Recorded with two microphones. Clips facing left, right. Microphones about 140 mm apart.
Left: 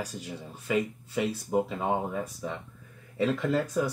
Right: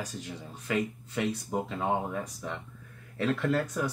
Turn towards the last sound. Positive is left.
turn(degrees=5)  # may be behind; listen again after turning